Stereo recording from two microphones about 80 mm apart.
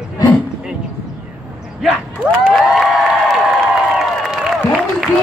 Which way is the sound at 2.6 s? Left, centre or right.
Centre.